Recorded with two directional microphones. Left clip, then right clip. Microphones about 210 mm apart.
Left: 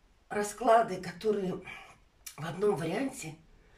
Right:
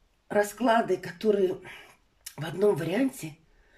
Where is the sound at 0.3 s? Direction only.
45° right (ahead or behind).